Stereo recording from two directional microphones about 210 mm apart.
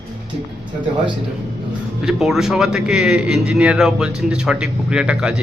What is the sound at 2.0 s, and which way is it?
A man's voice, centre (ahead or behind).